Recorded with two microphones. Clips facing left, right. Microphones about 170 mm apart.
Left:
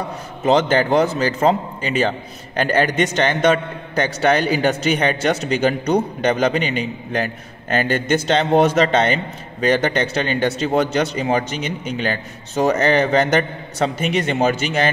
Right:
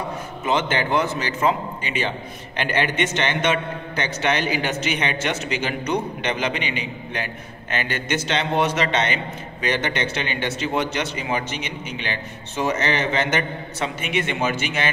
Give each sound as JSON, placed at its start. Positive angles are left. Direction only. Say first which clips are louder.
{"t": 0.5, "sound": "a man's voice", "louder": "left 6 dB", "side_deg": 40}